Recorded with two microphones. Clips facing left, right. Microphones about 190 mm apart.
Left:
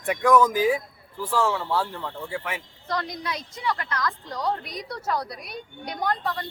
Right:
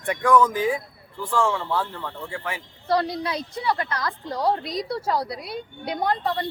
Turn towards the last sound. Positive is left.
turn(degrees=-25)  # may be behind; listen again after turning